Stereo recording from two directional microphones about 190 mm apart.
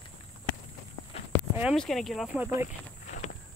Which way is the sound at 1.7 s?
Centre (ahead or behind).